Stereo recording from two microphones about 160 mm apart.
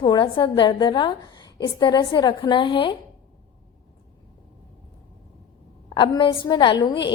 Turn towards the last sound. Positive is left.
turn(degrees=25)  # may be behind; listen again after turning